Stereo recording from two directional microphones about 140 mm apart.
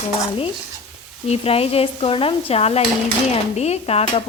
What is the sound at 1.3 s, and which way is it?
Speech, 45° left (ahead or behind).